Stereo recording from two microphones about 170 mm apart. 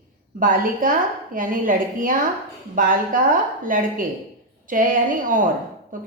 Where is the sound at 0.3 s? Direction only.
50° right (ahead or behind).